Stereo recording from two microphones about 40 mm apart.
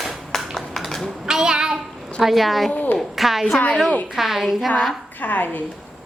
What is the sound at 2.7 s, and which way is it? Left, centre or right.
Speech, left.